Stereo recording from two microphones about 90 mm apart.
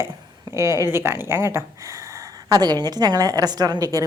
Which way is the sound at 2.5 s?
50° right (ahead or behind).